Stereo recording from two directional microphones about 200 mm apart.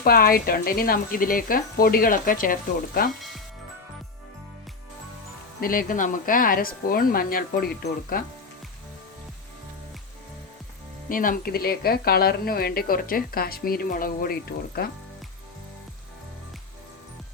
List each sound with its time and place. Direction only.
0.0 s speech: 50° left (ahead or behind)
5.5 s speech: 45° left (ahead or behind)
11.1 s speech: 45° left (ahead or behind)